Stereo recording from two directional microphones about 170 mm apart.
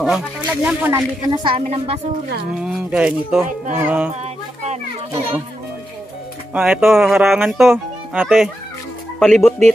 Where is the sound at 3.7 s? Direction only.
10° right (ahead or behind).